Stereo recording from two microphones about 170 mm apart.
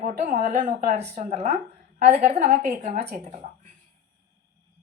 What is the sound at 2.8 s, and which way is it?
Speech, 65° right (ahead or behind).